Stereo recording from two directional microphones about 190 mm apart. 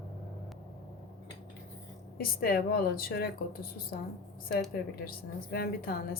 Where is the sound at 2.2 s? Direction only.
50° left (ahead or behind).